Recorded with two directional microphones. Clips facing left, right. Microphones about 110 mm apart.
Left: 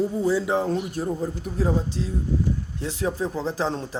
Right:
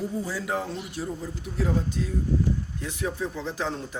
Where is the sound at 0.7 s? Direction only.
45° left (ahead or behind).